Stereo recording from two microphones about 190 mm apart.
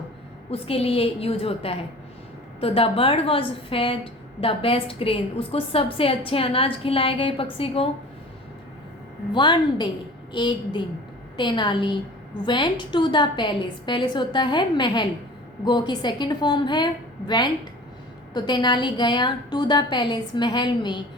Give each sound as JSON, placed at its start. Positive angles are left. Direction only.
{"t": 0.5, "sound": "a woman's voice", "side_deg": 30}
{"t": 9.3, "sound": "a woman's voice", "side_deg": 25}